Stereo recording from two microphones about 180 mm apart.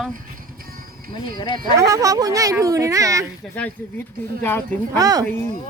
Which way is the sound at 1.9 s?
20° right (ahead or behind).